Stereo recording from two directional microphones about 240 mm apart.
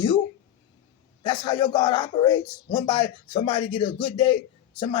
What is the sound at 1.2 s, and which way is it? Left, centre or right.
Speech, centre.